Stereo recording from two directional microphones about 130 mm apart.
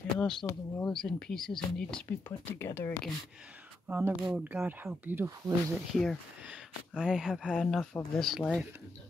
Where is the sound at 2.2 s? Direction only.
15° left (ahead or behind).